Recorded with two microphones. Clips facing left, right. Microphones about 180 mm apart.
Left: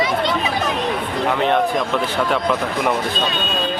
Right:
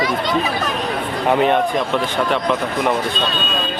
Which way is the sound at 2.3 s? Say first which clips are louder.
Right 1 dB; centre (ahead or behind).